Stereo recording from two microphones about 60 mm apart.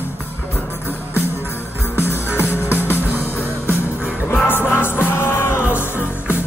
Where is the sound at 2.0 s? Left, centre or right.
Left.